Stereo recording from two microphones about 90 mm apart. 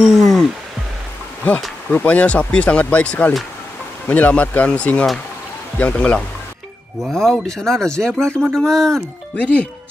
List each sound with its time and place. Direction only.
0.0 s a sound: centre (ahead or behind)
1.9 s speech: 20° left (ahead or behind)
9.4 s speech: 15° left (ahead or behind)